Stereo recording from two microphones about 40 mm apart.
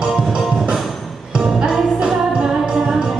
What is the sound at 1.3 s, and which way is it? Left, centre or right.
Music, centre.